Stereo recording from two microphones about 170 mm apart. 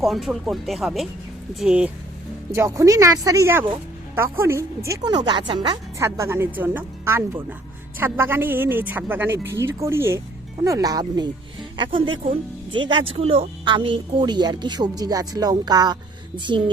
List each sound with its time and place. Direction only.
0.0 s speech: centre (ahead or behind)
2.5 s a woman's voice: 15° right (ahead or behind)